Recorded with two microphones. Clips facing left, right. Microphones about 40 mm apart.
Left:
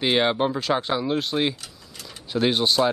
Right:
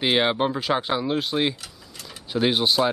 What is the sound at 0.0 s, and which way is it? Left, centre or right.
Speech, centre.